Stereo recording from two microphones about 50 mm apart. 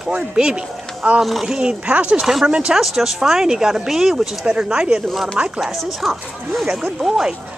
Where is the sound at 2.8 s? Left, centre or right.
Centre.